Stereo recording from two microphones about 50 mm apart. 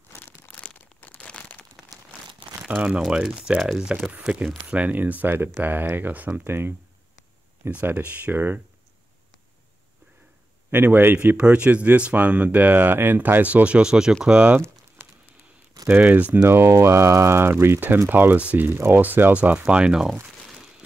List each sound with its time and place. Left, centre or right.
0.5 s crumpling: left
1.8 s crumpling: centre
2.7 s speech: right
3.1 s speech: centre
4.6 s speech: right
6.4 s speech: right
8.0 s speech: right
10.7 s speech: right
11.3 s speech: right
15.0 s a sound: right
15.9 s speech: right
16.4 s speech: right
19.3 s speech: right